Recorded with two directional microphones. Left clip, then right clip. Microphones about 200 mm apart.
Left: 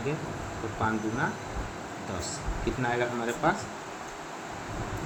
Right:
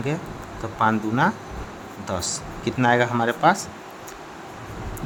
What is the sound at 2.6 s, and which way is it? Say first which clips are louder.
Speech: right 10 dB; 45° right (ahead or behind).